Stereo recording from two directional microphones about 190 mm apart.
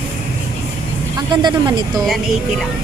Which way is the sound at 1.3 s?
25° right (ahead or behind).